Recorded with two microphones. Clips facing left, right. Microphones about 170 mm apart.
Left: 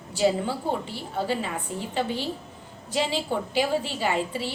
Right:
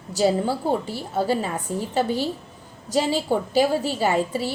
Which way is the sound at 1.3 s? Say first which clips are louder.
Right 4 dB; 40° right (ahead or behind).